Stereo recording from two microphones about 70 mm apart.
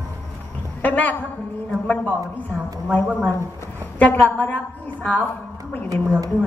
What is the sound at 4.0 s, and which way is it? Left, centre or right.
A woman's voice, left.